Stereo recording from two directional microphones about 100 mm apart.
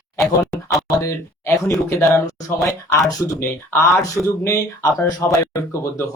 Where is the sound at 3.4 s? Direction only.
30° left (ahead or behind).